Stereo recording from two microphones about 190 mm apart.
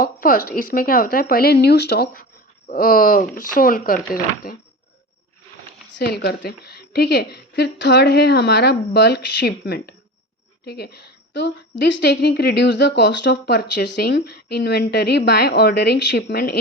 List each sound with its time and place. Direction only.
0.0 s speech: 50° left (ahead or behind)
6.0 s a woman's voice: 60° left (ahead or behind)